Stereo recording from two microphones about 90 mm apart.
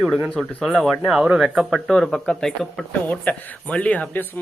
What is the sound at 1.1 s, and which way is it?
Speech, 10° right (ahead or behind).